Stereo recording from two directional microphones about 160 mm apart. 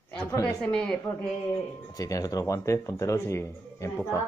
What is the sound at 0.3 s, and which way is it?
Speech, 20° left (ahead or behind).